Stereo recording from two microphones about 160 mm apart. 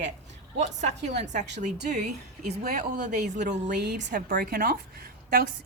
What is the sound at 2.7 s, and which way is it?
Speech, 50° right (ahead or behind).